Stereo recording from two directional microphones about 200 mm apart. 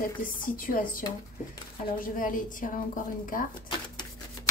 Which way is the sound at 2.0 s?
40° left (ahead or behind).